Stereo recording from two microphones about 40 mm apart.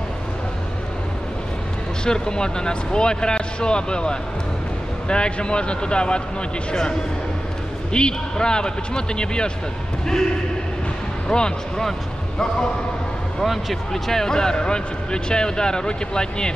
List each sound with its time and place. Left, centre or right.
2.0 s a man's voice: centre
11.2 s speech: left
13.4 s speech: centre; by 16.5 s left